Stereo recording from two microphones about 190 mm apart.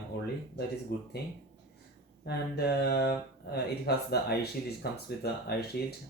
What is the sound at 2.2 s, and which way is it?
Speech, 60° left (ahead or behind).